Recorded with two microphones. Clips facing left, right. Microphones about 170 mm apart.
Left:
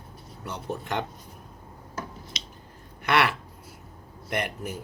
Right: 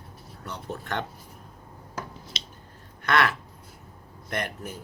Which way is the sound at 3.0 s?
10° left (ahead or behind).